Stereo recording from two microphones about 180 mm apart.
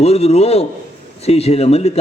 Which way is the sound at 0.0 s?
35° left (ahead or behind).